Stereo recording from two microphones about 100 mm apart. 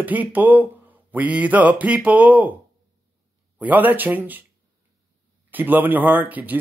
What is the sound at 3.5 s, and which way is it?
Speech, 15° right (ahead or behind).